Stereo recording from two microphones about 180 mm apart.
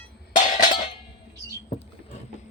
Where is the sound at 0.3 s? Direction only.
45° left (ahead or behind).